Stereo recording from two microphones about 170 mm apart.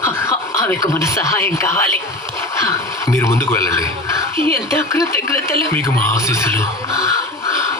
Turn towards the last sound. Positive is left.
turn(degrees=15)  # may be behind; listen again after turning